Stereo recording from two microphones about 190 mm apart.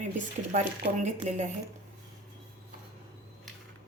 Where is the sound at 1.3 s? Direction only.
40° right (ahead or behind).